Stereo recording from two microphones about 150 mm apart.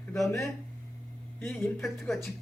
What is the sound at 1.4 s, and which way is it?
Speech, 15° left (ahead or behind).